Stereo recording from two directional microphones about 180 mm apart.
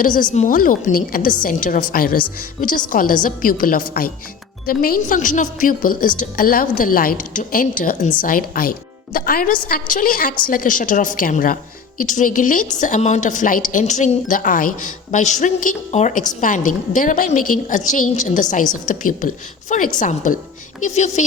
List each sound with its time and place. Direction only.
0.0 s a woman's voice: 50° left (ahead or behind)